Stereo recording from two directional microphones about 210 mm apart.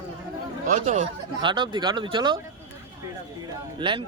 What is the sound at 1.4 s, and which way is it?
Speech, 20° right (ahead or behind).